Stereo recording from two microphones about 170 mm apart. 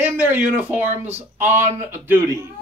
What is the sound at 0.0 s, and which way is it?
Speech, 10° right (ahead or behind).